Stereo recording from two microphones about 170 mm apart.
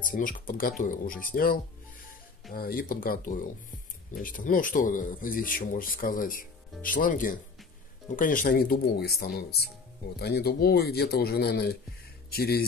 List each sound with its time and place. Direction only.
0.0 s speech: 55° left (ahead or behind)